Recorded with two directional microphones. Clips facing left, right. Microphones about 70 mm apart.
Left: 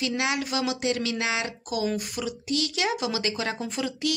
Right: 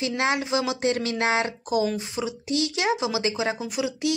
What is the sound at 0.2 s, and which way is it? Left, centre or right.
Speech, right.